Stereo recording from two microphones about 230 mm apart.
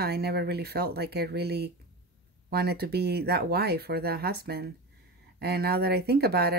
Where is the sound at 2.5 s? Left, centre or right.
Right.